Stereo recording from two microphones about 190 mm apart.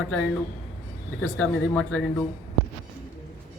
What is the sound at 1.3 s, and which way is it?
Speech, 5° left (ahead or behind).